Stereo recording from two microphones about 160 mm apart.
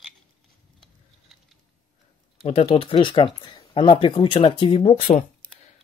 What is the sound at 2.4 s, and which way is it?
Speech, 35° left (ahead or behind).